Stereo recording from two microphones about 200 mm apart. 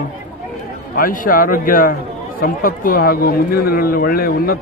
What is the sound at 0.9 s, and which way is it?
A man's voice, 45° left (ahead or behind).